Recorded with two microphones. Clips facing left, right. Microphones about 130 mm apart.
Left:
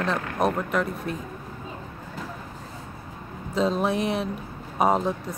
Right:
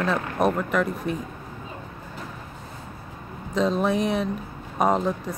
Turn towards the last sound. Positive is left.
turn(degrees=0)  # may be behind; listen again after turning